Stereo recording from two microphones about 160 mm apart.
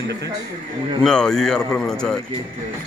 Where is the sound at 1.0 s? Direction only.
5° left (ahead or behind).